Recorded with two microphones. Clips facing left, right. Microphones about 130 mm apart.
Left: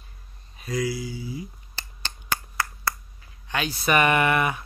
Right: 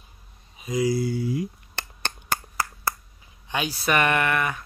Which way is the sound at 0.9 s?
65° right (ahead or behind).